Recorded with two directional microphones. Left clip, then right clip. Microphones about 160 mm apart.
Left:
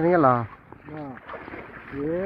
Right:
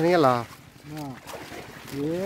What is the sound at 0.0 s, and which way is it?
Speech, 20° right (ahead or behind).